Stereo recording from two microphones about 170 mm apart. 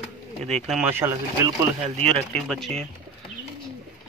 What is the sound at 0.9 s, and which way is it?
Speech, 15° right (ahead or behind).